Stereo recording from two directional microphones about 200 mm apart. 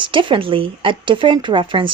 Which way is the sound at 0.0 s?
25° right (ahead or behind).